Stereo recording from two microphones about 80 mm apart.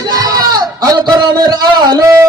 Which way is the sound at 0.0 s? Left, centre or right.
Right.